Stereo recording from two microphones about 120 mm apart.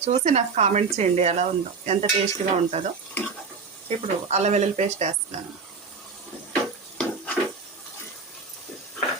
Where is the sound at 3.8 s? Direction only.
65° right (ahead or behind).